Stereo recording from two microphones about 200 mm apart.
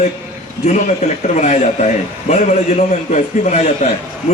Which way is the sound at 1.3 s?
35° left (ahead or behind).